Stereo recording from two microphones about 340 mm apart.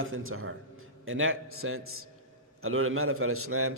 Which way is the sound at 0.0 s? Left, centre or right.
Right.